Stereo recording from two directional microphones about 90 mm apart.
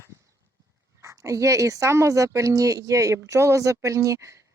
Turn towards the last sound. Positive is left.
turn(degrees=-35)  # may be behind; listen again after turning